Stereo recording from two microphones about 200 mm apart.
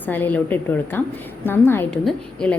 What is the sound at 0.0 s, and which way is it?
A woman's voice, 10° left (ahead or behind).